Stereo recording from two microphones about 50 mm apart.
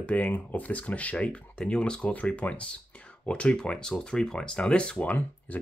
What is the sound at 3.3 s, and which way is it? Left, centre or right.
Speech, centre.